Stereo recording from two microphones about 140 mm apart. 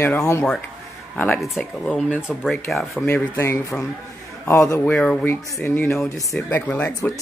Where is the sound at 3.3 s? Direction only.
20° left (ahead or behind).